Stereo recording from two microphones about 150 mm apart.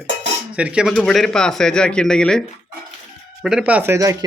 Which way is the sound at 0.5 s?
10° right (ahead or behind).